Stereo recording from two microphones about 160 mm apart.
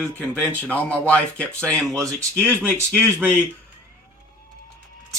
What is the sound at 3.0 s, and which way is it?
Speech, 15° right (ahead or behind).